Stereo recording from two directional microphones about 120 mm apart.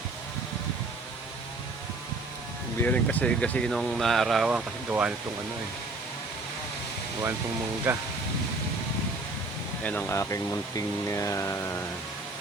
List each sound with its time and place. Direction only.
2.8 s speech: 15° left (ahead or behind); by 5.1 s 10° right (ahead or behind)
7.9 s speech: 15° right (ahead or behind)
9.8 s speech: 15° left (ahead or behind)